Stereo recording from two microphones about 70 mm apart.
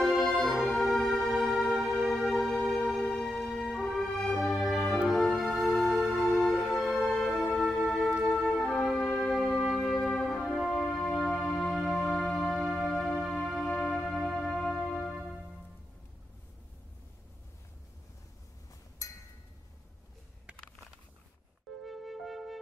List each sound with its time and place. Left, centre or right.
0.0 s music: centre
8.6 s music: centre
10.4 s music: centre
11.0 s music: centre
11.7 s music: centre
13.7 s music: centre
19.0 s a sound: left
21.8 s music: centre